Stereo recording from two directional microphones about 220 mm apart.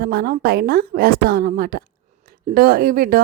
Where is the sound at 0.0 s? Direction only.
45° right (ahead or behind).